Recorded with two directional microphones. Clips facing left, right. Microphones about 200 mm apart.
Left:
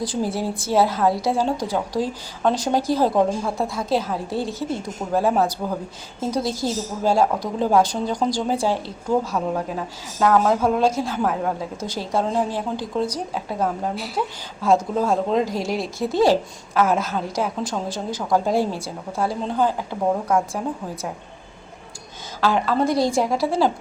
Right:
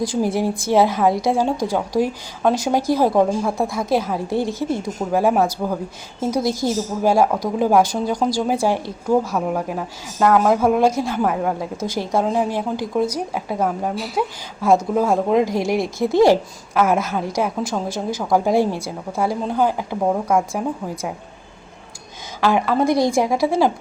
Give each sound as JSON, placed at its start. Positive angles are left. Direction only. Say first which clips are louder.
{"t": 0.0, "sound": "a woman's voice", "louder": "right 4 dB", "side_deg": -10}
{"t": 22.4, "sound": "a woman's voice", "louder": "right 2 dB", "side_deg": -15}